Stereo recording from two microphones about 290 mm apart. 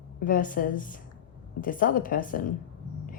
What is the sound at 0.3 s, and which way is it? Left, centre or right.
A woman's voice, left.